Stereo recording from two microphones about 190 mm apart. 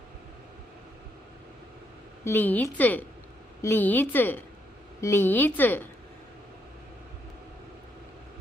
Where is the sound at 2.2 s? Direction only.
10° left (ahead or behind).